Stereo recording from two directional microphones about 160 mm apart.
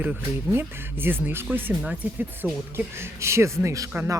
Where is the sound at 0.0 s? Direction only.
10° right (ahead or behind).